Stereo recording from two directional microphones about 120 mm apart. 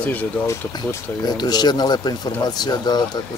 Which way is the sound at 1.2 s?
35° left (ahead or behind).